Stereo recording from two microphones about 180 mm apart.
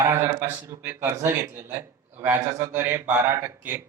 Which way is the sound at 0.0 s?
15° right (ahead or behind).